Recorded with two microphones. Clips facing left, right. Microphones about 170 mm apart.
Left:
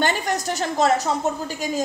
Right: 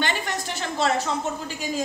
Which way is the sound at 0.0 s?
40° left (ahead or behind).